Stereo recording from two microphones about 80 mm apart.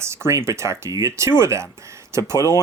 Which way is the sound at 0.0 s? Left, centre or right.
Right.